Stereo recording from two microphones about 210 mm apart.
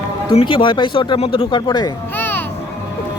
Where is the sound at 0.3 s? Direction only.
25° left (ahead or behind).